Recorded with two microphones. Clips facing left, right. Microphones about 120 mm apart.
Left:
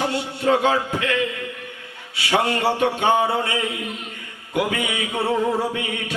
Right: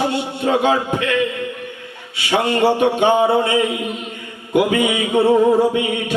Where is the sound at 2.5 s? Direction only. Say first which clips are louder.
Right 5 dB; 20° right (ahead or behind).